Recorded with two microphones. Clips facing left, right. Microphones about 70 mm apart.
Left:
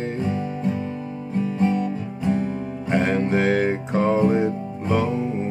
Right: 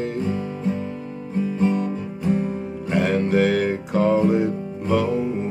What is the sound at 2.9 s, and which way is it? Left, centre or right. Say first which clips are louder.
Music: right 1 dB; left.